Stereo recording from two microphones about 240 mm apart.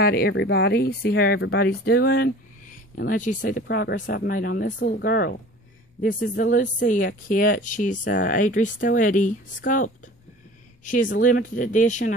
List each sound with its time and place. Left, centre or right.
0.0 s speech: left